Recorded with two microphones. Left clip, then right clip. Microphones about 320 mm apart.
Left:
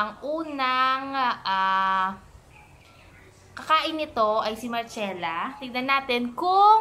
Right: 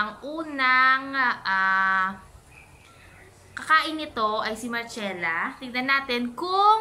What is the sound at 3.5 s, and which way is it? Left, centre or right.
A woman's voice, centre.